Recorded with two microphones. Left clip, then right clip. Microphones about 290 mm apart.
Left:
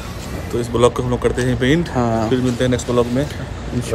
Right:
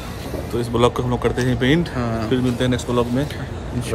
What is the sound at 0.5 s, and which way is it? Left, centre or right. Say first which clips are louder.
Speech: left 3 dB; centre.